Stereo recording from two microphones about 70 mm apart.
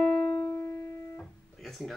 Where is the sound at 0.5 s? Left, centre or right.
Left.